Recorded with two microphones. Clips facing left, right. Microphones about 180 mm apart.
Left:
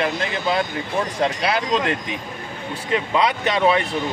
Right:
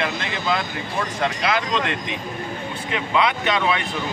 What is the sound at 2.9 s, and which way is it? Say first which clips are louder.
Speech: left 2 dB; 40° left (ahead or behind).